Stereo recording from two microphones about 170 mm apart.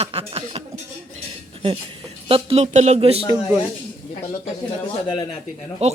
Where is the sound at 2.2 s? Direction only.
35° right (ahead or behind).